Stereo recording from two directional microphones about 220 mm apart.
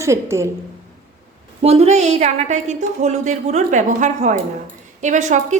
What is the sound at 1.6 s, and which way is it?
A woman's voice, 30° right (ahead or behind).